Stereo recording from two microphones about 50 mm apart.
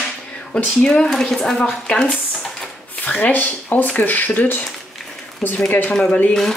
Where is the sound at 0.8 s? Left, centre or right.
Centre.